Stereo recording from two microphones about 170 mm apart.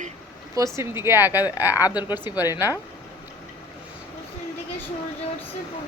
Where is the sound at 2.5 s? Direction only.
15° right (ahead or behind).